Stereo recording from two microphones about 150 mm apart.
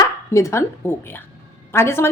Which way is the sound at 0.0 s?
20° left (ahead or behind).